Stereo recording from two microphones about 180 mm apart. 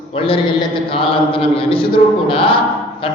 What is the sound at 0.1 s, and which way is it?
A man's voice, 30° left (ahead or behind).